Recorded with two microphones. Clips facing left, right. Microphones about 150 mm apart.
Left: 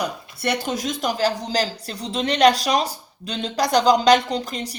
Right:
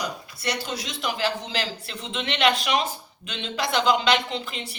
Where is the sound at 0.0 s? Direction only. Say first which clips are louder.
Left 5 dB; 55° left (ahead or behind).